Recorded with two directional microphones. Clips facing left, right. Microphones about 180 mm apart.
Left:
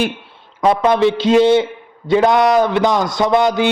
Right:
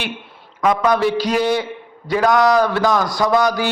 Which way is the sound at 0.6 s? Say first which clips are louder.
Left 3 dB; 30° left (ahead or behind).